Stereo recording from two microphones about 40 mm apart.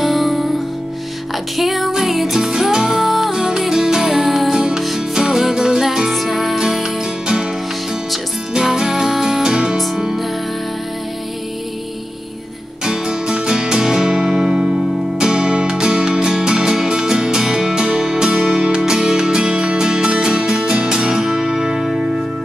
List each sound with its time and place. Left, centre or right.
0.0 s music: centre
1.6 s music: centre
2.4 s music: centre
8.5 s music: centre
12.8 s music: centre